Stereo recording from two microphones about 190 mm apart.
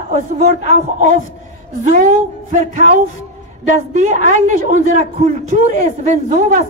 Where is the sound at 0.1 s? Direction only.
40° right (ahead or behind).